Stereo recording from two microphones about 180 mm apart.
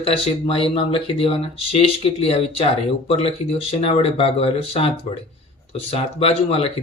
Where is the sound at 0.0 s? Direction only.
30° left (ahead or behind).